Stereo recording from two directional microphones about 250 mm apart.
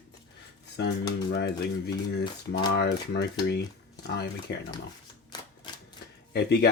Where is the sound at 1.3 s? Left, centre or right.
Left.